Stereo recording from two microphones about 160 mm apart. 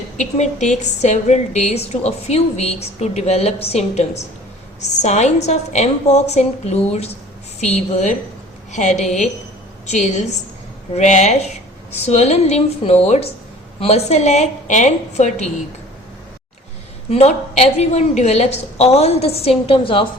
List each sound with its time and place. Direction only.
0.2 s a woman's voice: 45° left (ahead or behind)
17.1 s a woman's voice: 45° left (ahead or behind)